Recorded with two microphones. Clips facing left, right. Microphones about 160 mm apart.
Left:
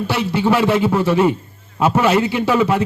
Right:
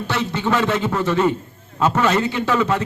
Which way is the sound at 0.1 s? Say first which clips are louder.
Left 3 dB; 10° left (ahead or behind).